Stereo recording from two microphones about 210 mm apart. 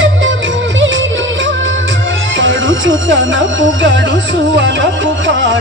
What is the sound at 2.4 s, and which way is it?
Music, 65° right (ahead or behind).